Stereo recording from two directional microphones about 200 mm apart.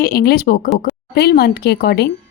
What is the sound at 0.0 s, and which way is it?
Speech, 50° left (ahead or behind).